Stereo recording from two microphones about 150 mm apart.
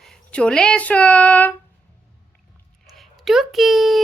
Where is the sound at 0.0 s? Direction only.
5° left (ahead or behind).